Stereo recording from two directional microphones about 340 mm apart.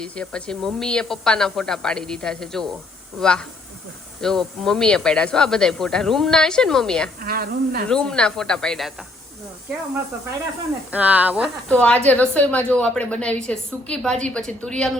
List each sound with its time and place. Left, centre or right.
0.0 s speech: centre
7.2 s a woman's voice: right
7.9 s speech: centre
10.9 s speech: centre